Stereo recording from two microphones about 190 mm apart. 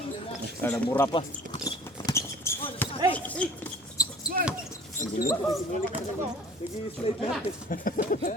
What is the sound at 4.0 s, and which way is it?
Basketball bounce, 20° left (ahead or behind).